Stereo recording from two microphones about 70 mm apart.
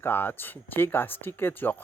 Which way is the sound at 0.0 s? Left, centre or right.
Left.